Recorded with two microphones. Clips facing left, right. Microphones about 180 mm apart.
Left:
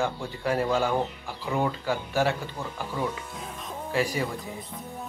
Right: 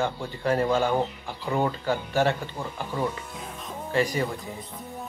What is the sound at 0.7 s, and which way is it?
Speech, 15° right (ahead or behind).